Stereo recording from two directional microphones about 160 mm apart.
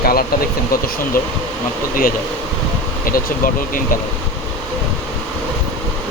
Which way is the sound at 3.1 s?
60° left (ahead or behind).